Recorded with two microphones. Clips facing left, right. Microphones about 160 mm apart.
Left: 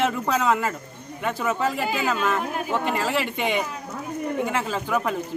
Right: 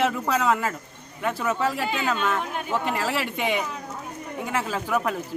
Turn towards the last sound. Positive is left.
turn(degrees=0)  # may be behind; listen again after turning